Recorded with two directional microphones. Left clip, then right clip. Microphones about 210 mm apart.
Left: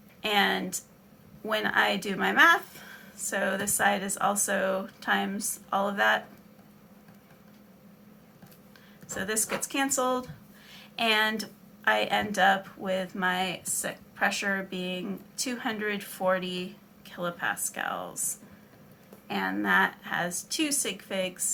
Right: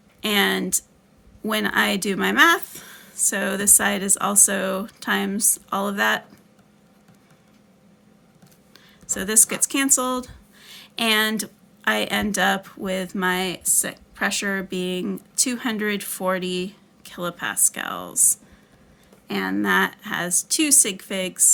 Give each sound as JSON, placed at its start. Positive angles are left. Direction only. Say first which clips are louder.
{"t": 0.2, "sound": "a woman's voice", "louder": "right 4 dB", "side_deg": -50}
{"t": 9.1, "sound": "a woman's voice", "louder": "right 7 dB", "side_deg": -50}
{"t": 19.3, "sound": "a woman's voice", "louder": "right 4 dB", "side_deg": -50}